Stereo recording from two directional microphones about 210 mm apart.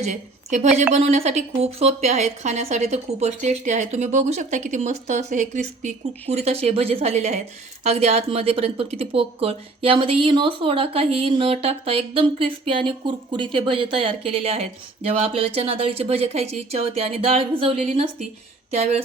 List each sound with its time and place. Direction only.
0.0 s a woman's voice: 35° right (ahead or behind)